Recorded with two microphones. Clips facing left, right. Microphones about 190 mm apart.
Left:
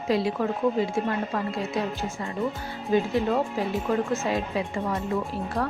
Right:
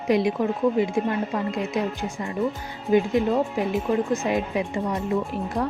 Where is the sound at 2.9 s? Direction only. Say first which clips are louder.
Right 3 dB; 15° right (ahead or behind).